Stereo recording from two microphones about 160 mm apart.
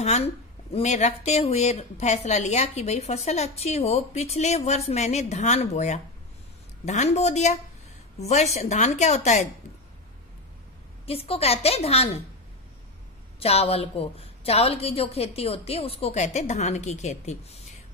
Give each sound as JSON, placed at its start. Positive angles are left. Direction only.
{"t": 0.0, "sound": "speech", "side_deg": 40}
{"t": 11.1, "sound": "a woman's voice", "side_deg": 35}
{"t": 13.4, "sound": "a woman's voice", "side_deg": 40}